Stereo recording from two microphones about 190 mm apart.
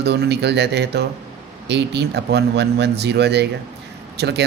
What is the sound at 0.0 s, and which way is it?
A man's voice, 60° right (ahead or behind).